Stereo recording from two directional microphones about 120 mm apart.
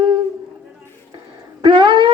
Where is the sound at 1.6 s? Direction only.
40° right (ahead or behind).